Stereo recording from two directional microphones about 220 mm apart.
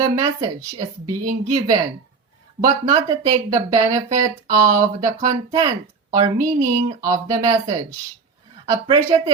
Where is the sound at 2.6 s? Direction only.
25° right (ahead or behind).